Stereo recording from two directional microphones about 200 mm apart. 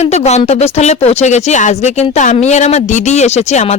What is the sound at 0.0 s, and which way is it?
Speech, 35° left (ahead or behind).